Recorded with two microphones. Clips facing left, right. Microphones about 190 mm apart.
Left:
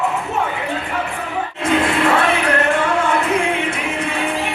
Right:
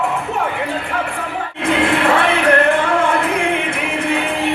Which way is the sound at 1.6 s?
60° right (ahead or behind).